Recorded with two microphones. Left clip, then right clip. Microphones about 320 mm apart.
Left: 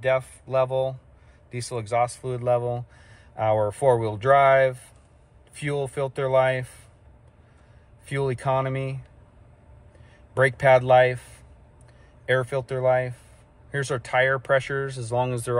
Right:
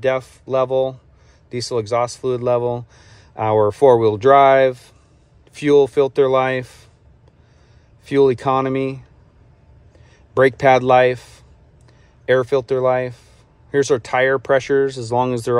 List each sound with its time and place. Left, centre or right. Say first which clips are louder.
0.0 s a man's voice: right 4 dB; right
8.0 s a man's voice: right 12 dB; right
10.3 s a man's voice: right 5 dB; right